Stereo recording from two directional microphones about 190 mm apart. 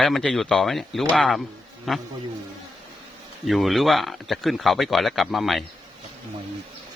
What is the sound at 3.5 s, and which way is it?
Speech, centre (ahead or behind).